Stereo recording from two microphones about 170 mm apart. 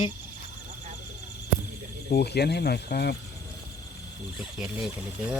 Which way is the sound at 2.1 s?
75° left (ahead or behind).